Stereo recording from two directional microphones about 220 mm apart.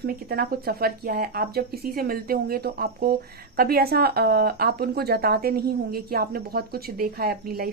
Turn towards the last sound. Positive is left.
turn(degrees=-45)  # may be behind; listen again after turning